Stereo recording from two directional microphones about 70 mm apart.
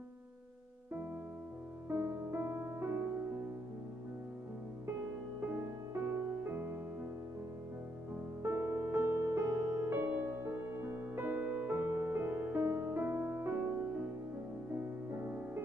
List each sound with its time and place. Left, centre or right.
1.9 s music: right
5.5 s music: right
8.4 s music: right
15.1 s music: right